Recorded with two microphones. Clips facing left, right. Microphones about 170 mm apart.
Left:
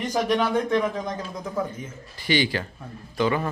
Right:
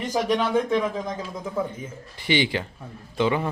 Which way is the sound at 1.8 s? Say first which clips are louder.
Right 1 dB; 20° right (ahead or behind).